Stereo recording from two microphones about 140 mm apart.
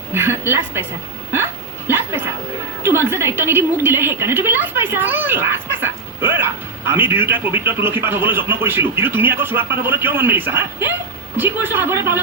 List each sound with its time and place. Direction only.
0.1 s a woman's voice: 15° right (ahead or behind)
1.9 s dog: 15° right (ahead or behind)
2.8 s a woman's voice: 20° right (ahead or behind)